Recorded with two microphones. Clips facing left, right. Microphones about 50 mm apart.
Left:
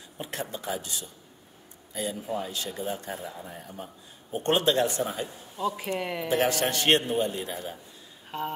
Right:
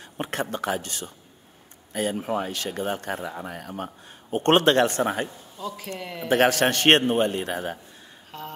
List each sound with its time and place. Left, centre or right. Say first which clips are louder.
0.2 s a man's voice: right 7 dB; right
5.6 s speech: left 4 dB; centre
6.2 s a man's voice: right 7 dB; right
8.3 s speech: left 5 dB; left